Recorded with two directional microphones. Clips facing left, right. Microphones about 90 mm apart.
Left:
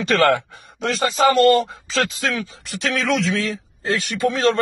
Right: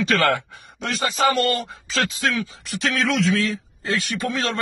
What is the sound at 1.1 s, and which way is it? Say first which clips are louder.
Speech: left 7 dB; 30° left (ahead or behind).